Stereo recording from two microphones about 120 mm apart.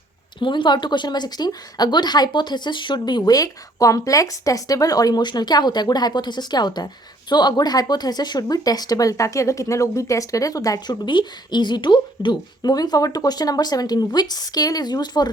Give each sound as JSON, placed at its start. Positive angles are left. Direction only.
{"t": 0.3, "sound": "speech", "side_deg": 40}